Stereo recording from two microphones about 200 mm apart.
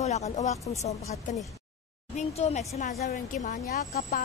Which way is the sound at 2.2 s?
35° left (ahead or behind).